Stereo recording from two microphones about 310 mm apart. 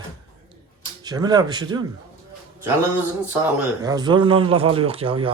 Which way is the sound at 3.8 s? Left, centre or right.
Centre.